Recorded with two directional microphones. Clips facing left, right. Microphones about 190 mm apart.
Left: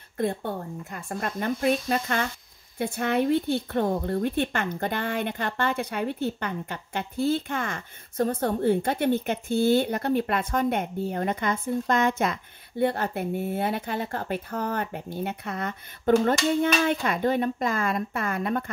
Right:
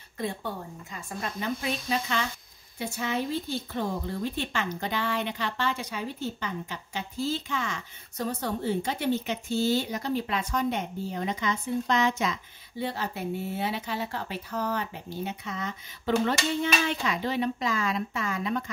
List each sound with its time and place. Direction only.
0.2 s a woman's voice: 55° left (ahead or behind)